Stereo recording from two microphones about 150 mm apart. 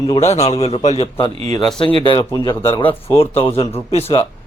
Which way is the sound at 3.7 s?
45° left (ahead or behind).